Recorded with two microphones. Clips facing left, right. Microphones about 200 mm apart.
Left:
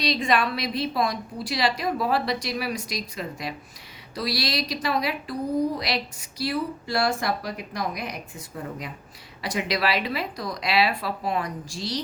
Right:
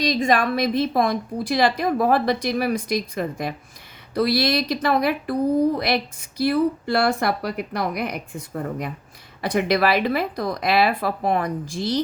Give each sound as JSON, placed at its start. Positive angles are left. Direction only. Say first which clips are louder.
{"t": 0.0, "sound": "a woman's voice", "louder": "right 4 dB", "side_deg": -45}
{"t": 9.4, "sound": "a woman's voice", "louder": "right 6 dB", "side_deg": -55}